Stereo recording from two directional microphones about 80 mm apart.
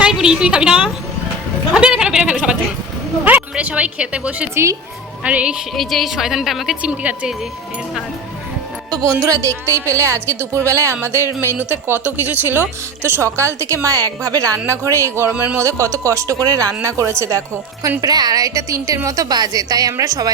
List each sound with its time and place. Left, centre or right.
0.0 s a woman's voice: centre
1.7 s a sound: centre
3.2 s speech: centre
4.5 s a woman's voice: right
5.2 s speech: centre
5.7 s a woman's voice: centre
6.8 s speech: centre
9.2 s a woman's voice: right
18.0 s speech: right